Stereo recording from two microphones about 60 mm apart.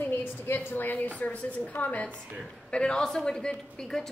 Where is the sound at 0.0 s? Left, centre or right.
Left.